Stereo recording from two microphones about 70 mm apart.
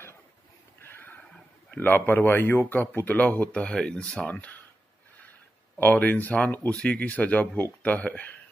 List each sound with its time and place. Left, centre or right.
0.7 s a sound: left
1.7 s speech: left
5.8 s speech: left